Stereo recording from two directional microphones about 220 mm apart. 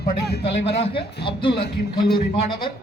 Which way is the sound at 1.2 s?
20° left (ahead or behind).